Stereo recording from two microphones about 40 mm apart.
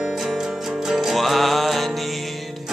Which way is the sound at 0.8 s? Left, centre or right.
Centre.